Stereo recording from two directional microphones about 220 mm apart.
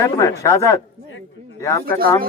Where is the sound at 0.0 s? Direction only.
15° left (ahead or behind).